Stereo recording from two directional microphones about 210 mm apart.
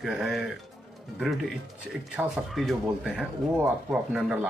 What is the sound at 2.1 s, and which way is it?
Speech, centre (ahead or behind).